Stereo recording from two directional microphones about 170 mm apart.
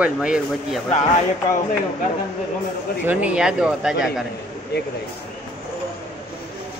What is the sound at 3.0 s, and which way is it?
Speech, 5° right (ahead or behind).